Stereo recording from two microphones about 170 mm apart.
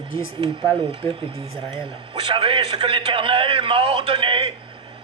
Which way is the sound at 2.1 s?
30° right (ahead or behind).